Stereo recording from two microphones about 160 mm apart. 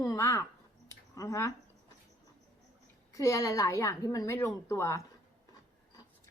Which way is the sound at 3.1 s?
20° left (ahead or behind).